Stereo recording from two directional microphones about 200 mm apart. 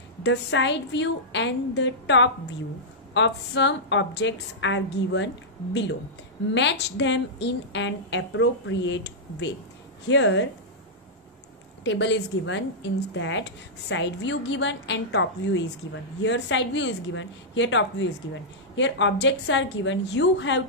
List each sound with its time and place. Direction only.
0.2 s a woman's voice: 60° left (ahead or behind)
11.8 s a woman's voice: 65° left (ahead or behind)